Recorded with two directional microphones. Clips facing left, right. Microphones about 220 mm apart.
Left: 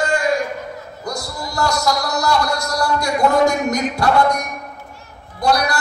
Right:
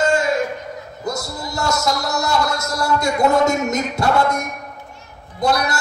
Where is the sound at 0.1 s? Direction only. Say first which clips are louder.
Even; 25° right (ahead or behind).